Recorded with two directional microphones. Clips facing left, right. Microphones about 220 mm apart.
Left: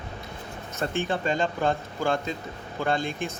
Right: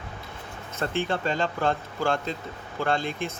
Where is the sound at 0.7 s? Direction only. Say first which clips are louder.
Even; 15° left (ahead or behind).